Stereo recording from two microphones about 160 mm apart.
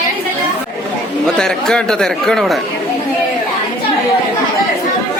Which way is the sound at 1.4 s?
5° left (ahead or behind).